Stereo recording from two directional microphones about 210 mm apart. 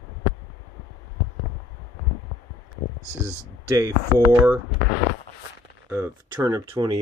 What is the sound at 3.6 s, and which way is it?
Speech, 15° right (ahead or behind).